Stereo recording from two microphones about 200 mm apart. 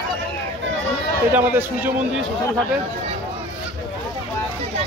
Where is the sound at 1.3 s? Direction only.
10° right (ahead or behind).